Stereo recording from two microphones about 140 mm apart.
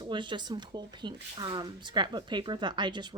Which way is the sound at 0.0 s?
35° right (ahead or behind).